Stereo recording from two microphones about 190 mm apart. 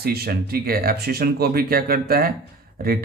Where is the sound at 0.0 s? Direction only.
55° right (ahead or behind).